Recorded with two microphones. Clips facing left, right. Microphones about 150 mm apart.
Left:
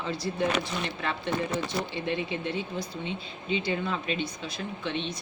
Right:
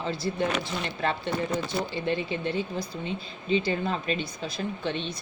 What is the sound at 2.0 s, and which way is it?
Speech, 35° right (ahead or behind).